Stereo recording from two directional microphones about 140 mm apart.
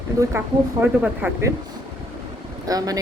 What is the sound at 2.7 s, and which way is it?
Speech, 25° right (ahead or behind).